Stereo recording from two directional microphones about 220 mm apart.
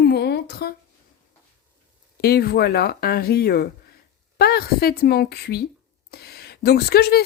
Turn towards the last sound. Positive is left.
turn(degrees=45)  # may be behind; listen again after turning